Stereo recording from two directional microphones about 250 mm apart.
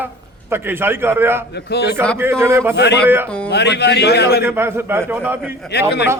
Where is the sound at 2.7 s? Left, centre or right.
Left.